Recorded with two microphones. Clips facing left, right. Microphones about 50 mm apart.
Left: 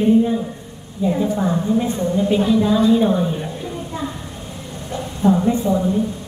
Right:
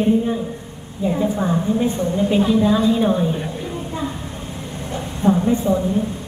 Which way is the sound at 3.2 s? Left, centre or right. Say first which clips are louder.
Right 1 dB; centre.